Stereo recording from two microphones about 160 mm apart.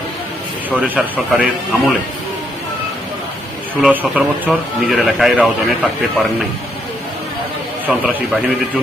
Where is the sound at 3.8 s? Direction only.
5° right (ahead or behind).